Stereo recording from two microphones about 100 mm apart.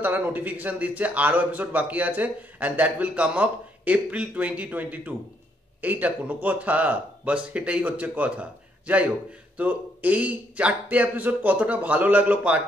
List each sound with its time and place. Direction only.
0.0 s a man's voice: 20° right (ahead or behind)